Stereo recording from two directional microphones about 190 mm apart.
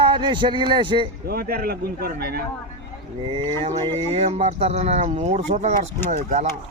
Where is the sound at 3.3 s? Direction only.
30° right (ahead or behind).